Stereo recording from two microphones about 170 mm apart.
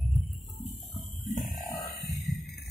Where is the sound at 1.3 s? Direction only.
50° left (ahead or behind).